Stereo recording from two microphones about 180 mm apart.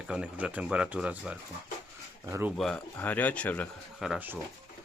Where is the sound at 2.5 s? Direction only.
5° left (ahead or behind).